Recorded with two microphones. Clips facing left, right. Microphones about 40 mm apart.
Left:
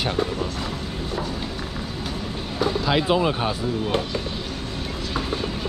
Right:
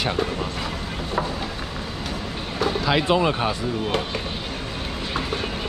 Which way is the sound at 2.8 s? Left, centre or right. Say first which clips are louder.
Right 1 dB; centre.